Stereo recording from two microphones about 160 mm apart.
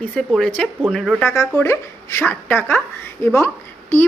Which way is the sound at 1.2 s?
15° left (ahead or behind).